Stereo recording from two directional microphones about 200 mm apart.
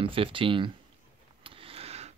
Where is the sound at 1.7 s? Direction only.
30° right (ahead or behind).